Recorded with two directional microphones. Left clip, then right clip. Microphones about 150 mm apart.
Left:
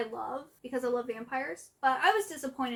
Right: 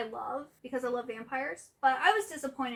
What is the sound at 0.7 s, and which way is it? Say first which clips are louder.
A woman's voice: left 2 dB; 40° left (ahead or behind).